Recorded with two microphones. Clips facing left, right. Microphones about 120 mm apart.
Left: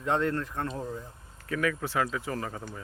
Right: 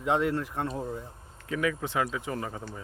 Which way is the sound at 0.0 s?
15° right (ahead or behind).